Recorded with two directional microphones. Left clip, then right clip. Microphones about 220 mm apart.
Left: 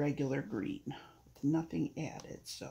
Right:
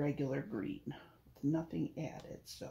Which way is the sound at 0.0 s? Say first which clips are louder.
Left 2 dB; 35° left (ahead or behind).